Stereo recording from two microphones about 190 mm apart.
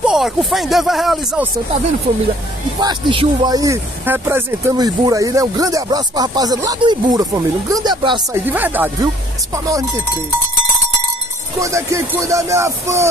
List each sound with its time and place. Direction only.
0.0 s speech: centre (ahead or behind)
2.8 s speech: 25° right (ahead or behind)
8.5 s speech: 10° right (ahead or behind)
11.6 s speech: 15° right (ahead or behind)